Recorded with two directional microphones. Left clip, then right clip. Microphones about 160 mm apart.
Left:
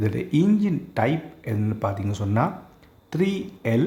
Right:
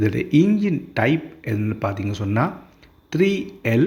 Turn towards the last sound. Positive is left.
turn(degrees=-10)  # may be behind; listen again after turning